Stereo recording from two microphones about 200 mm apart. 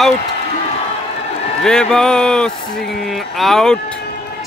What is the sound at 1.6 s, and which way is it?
Speech, 5° left (ahead or behind).